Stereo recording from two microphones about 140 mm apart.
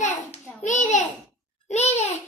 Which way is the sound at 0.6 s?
60° left (ahead or behind).